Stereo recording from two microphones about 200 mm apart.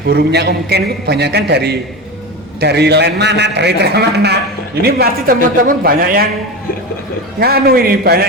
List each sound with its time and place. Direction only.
0.1 s a man's voice: 55° right (ahead or behind)
7.3 s a man's voice: 50° right (ahead or behind)